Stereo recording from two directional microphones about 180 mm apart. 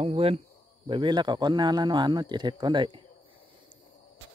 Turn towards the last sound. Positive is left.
turn(degrees=-25)  # may be behind; listen again after turning